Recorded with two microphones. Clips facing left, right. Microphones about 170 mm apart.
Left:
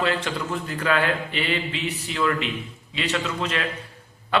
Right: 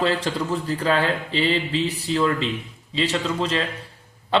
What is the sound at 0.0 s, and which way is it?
A man's voice, 35° right (ahead or behind).